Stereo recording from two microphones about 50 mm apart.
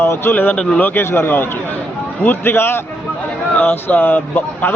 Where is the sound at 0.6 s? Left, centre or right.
Centre.